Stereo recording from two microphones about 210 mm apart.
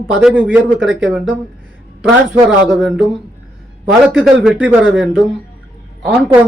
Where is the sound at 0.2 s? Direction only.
5° right (ahead or behind).